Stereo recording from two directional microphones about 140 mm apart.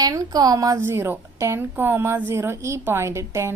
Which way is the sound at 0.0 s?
25° right (ahead or behind).